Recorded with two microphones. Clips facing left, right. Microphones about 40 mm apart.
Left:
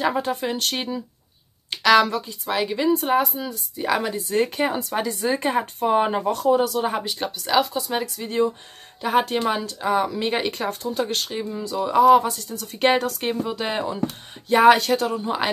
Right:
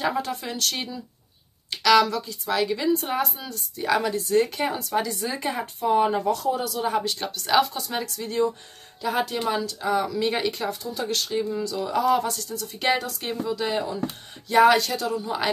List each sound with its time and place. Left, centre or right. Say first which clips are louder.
0.0 s speech: left 4 dB; left; by 3.5 s centre
3.7 s speech: even; centre; by 6.9 s left
6.9 s speech: even; centre
9.0 s speech: left 4 dB; left
10.5 s speech: left 3 dB; left